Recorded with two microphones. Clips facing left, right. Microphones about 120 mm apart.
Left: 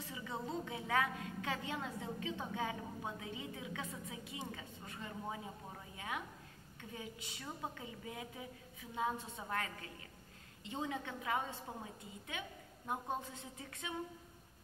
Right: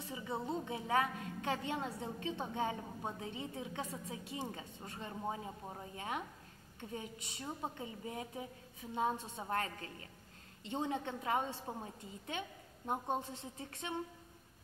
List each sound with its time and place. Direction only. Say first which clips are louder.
0.0 s a woman's voice: right 3 dB; 25° right (ahead or behind)